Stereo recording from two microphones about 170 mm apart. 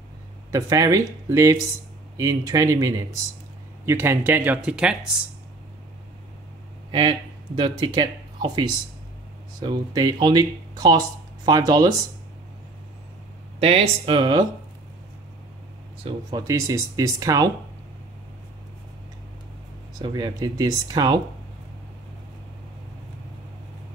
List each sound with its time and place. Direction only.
0.5 s speech: 20° right (ahead or behind)
6.9 s speech: 30° right (ahead or behind)
13.6 s speech: 35° right (ahead or behind)
16.0 s speech: 25° right (ahead or behind)
20.0 s speech: 25° right (ahead or behind)